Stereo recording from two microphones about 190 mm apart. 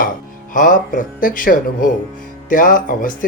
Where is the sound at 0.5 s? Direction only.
45° left (ahead or behind).